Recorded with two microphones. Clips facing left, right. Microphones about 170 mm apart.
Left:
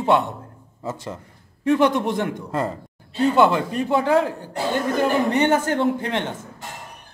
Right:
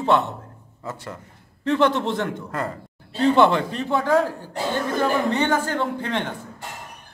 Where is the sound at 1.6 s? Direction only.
10° left (ahead or behind).